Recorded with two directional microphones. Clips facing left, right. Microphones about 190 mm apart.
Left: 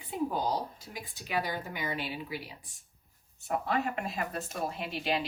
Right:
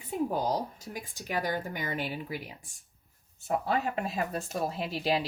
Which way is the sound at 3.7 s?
35° right (ahead or behind).